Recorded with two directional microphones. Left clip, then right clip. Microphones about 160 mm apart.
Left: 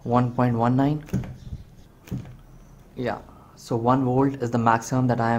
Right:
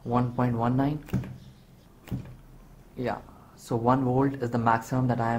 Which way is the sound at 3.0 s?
5° left (ahead or behind).